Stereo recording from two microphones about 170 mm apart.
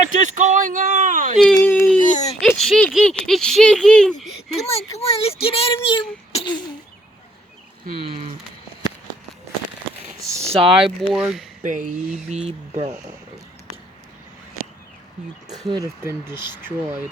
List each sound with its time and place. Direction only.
0.2 s speech: 45° right (ahead or behind)
1.5 s a sound: 15° left (ahead or behind)
2.0 s baby cry: 50° left (ahead or behind)
2.4 s speech: centre (ahead or behind)
4.5 s speech: 35° left (ahead or behind)
6.3 s a sound: 25° left (ahead or behind)
10.4 s speech: 35° right (ahead or behind)
11.1 s speech: centre (ahead or behind)
11.6 s speech: 50° right (ahead or behind)
15.6 s speech: 20° right (ahead or behind)